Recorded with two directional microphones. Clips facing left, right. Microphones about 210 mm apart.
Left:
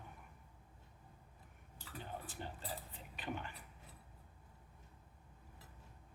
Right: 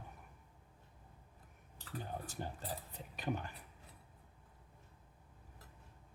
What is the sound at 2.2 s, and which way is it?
Cutlery, 45° right (ahead or behind).